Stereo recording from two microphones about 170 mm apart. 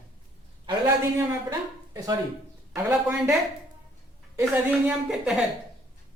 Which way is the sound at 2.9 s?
10° right (ahead or behind).